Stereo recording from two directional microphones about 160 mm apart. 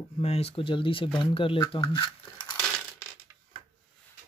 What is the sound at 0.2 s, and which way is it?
Speech, 40° left (ahead or behind).